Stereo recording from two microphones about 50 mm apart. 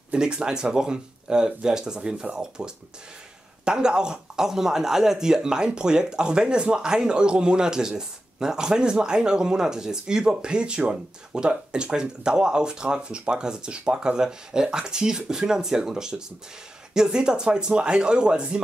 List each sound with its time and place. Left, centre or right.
0.1 s speech: centre